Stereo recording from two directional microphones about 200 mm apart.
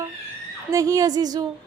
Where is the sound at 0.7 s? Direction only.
15° right (ahead or behind).